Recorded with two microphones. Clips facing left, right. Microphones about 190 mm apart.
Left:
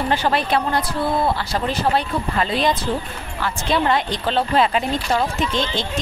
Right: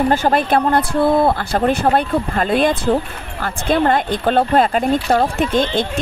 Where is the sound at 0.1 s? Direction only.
50° right (ahead or behind).